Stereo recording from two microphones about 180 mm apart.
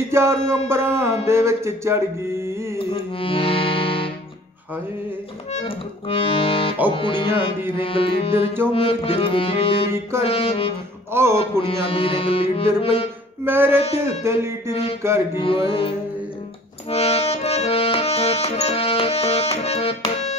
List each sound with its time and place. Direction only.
0.1 s music: 15° right (ahead or behind)
2.9 s music: 30° left (ahead or behind)
5.5 s accordion: 30° left (ahead or behind)
6.9 s music: 25° left (ahead or behind)
7.7 s accordion: 30° left (ahead or behind)
13.5 s music: 10° right (ahead or behind)
14.7 s accordion: 35° left (ahead or behind)
15.3 s music: 30° left (ahead or behind)
16.9 s accordion: 35° left (ahead or behind)